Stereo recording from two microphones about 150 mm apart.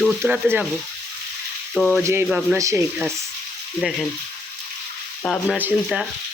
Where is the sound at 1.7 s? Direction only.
Centre (ahead or behind).